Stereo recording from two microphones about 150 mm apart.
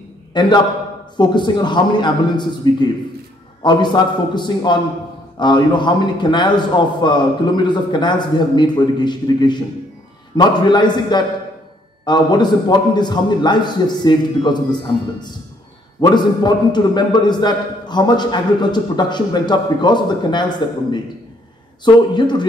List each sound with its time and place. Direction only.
0.3 s a man's voice: 30° left (ahead or behind)